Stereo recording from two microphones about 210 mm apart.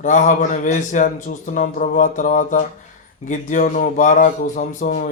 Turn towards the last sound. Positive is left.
turn(degrees=35)  # may be behind; listen again after turning